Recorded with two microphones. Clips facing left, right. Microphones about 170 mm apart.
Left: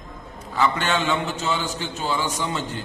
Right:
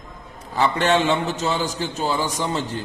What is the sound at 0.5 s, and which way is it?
A man's voice, 35° right (ahead or behind).